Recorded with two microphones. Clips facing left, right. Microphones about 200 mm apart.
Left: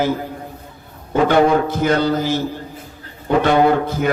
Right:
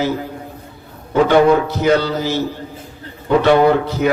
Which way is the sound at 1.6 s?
50° left (ahead or behind).